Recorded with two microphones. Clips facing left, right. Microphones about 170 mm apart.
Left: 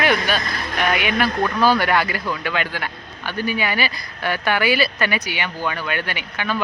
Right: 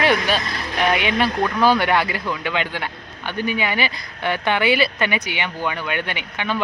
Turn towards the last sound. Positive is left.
turn(degrees=-20)  # may be behind; listen again after turning